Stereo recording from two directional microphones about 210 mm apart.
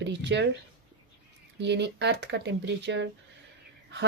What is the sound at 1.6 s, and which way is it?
A woman's voice, 55° right (ahead or behind).